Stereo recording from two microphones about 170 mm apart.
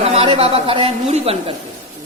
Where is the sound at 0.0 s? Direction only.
35° right (ahead or behind).